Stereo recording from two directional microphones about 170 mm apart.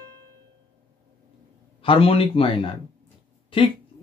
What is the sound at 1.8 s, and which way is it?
Speech, 35° left (ahead or behind).